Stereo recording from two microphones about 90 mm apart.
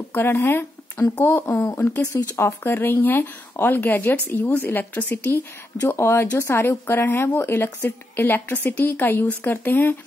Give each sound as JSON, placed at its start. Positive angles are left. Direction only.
{"t": 0.1, "sound": "speech", "side_deg": 25}